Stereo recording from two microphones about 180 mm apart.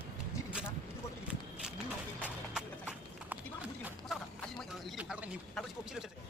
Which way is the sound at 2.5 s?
5° right (ahead or behind).